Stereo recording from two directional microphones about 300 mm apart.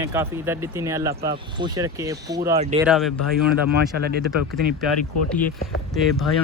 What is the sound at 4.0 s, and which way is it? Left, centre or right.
Speech, right.